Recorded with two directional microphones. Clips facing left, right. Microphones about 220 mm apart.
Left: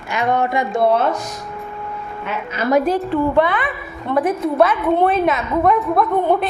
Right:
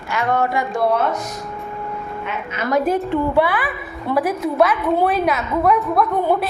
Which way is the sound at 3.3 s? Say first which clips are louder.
Left 1 dB; 5° right (ahead or behind).